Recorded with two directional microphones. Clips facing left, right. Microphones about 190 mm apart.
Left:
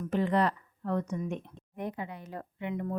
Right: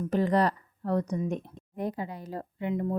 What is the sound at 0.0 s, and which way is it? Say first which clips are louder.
Speech: right 3 dB; 40° right (ahead or behind).